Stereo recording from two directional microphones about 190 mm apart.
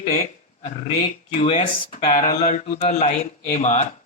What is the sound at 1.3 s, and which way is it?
Speech, 30° left (ahead or behind).